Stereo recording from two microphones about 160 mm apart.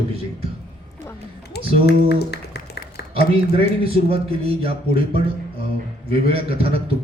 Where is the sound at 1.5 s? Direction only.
90° left.